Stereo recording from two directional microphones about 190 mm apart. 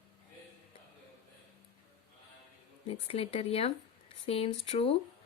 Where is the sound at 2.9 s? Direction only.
30° left (ahead or behind).